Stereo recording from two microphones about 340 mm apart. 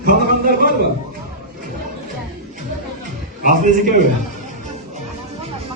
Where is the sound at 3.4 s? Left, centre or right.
Right.